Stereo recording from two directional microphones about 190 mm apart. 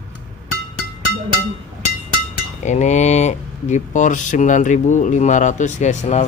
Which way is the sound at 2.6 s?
40° left (ahead or behind).